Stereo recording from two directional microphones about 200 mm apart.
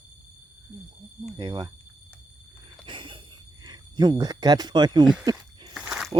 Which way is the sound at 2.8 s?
25° right (ahead or behind).